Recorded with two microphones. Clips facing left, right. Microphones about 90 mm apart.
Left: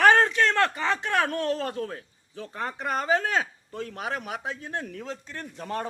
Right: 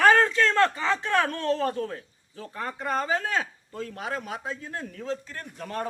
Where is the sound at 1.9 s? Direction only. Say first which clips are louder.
Right 1 dB; 30° left (ahead or behind).